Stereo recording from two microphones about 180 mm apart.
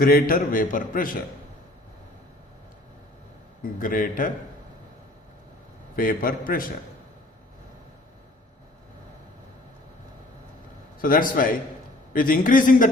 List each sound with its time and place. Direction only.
0.0 s a man's voice: 55° left (ahead or behind)
3.6 s a man's voice: 50° left (ahead or behind)
6.0 s a man's voice: 50° left (ahead or behind)
11.0 s a man's voice: 50° left (ahead or behind)